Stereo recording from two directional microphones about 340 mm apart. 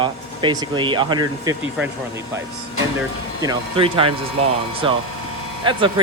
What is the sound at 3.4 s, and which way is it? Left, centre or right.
Speech, centre.